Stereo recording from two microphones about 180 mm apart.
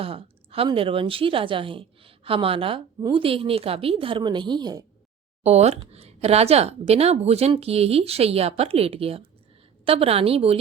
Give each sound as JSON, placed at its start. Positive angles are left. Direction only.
{"t": 0.0, "sound": "a woman's voice", "side_deg": -30}
{"t": 5.4, "sound": "speech", "side_deg": -35}